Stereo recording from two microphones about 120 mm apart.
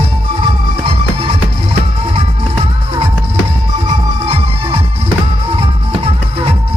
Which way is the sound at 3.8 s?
55° right (ahead or behind).